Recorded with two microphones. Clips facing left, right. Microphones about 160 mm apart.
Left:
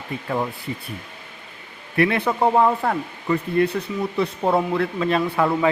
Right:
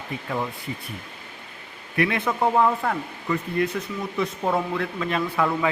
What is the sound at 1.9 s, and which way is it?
Speech, 35° left (ahead or behind).